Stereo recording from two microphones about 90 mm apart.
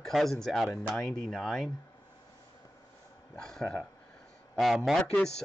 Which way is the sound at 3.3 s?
5° left (ahead or behind).